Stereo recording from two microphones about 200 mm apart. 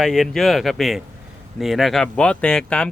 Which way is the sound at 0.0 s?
Centre (ahead or behind).